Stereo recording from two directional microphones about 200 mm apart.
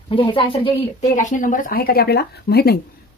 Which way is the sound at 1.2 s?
40° left (ahead or behind).